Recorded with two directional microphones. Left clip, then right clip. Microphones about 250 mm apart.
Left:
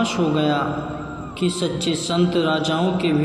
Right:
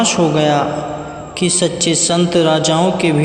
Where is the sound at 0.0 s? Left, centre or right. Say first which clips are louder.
Right 7 dB; right.